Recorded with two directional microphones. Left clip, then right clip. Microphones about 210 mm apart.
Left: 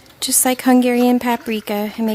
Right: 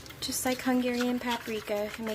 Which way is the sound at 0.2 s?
50° left (ahead or behind).